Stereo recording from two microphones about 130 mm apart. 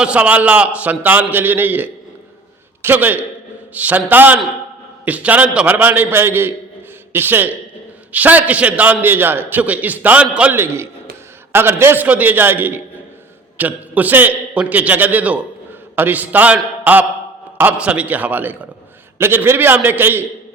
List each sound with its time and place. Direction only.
0.0 s a man's voice: 10° right (ahead or behind)